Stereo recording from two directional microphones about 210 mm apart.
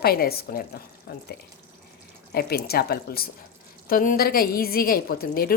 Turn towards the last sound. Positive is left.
turn(degrees=45)  # may be behind; listen again after turning